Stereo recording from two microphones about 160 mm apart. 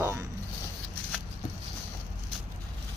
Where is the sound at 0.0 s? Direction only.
15° right (ahead or behind).